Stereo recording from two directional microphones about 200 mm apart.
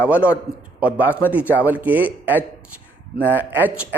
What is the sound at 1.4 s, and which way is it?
Speech, 10° left (ahead or behind).